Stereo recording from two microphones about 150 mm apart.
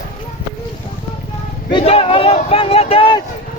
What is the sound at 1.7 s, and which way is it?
Speech, 35° left (ahead or behind).